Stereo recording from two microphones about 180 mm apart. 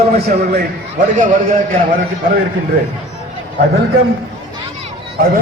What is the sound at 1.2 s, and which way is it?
Speech, 45° right (ahead or behind).